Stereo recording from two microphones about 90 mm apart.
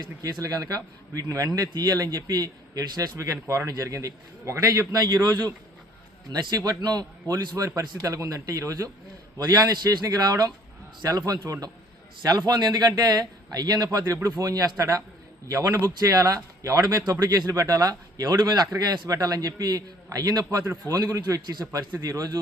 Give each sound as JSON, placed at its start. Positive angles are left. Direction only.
{"t": 0.2, "sound": "a man's voice", "side_deg": -40}
{"t": 6.6, "sound": "a man's voice", "side_deg": -45}